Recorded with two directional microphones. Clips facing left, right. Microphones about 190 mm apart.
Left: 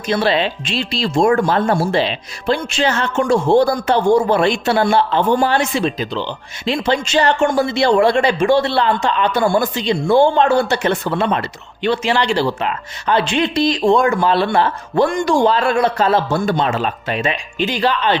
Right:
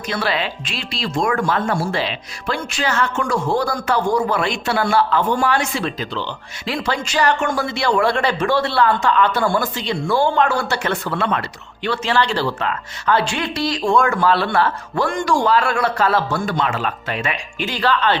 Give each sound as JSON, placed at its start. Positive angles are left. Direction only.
{"t": 0.1, "sound": "speech", "side_deg": 25}